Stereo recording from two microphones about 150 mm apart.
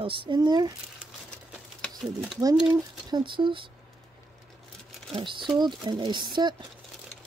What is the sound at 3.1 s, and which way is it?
Speech, 30° right (ahead or behind).